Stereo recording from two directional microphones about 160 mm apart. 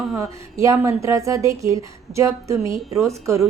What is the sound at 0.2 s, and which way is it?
A woman's voice, 20° right (ahead or behind).